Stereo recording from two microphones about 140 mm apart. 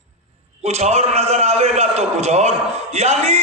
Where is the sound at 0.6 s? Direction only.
50° right (ahead or behind).